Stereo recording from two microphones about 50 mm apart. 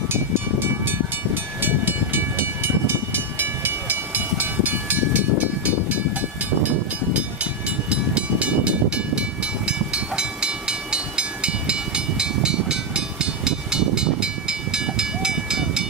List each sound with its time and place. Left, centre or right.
0.8 s train: right
3.3 s vehicle: right
7.9 s vehicle: right
9.7 s train: centre